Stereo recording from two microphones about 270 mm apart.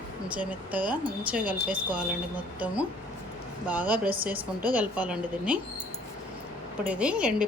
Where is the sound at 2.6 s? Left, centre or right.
Centre.